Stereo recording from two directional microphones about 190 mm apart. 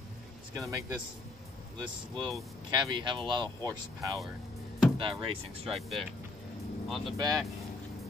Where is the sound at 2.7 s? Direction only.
25° right (ahead or behind).